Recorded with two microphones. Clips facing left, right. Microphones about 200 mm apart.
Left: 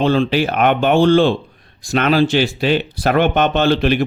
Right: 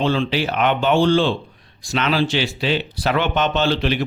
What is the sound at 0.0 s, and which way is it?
Speech, 50° left (ahead or behind).